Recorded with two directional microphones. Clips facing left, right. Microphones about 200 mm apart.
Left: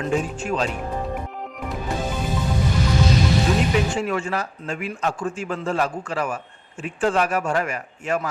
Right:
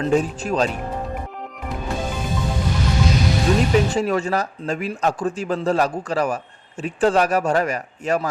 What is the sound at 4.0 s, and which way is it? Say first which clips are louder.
A man's voice: right 4 dB; 40° right (ahead or behind).